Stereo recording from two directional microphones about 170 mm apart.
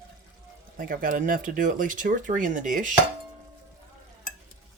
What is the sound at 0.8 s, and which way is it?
Speech, 55° right (ahead or behind).